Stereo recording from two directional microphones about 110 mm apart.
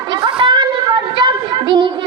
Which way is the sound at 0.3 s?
45° right (ahead or behind).